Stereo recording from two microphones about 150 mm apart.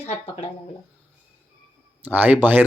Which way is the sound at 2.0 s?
10° right (ahead or behind).